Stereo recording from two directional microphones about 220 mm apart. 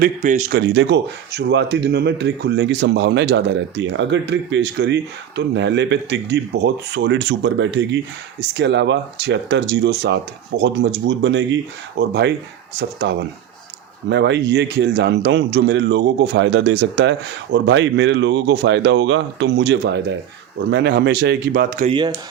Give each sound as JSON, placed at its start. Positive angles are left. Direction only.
{"t": 0.0, "sound": "speech", "side_deg": -35}
{"t": 0.6, "sound": "a man's voice", "side_deg": -50}
{"t": 21.8, "sound": "speech", "side_deg": -20}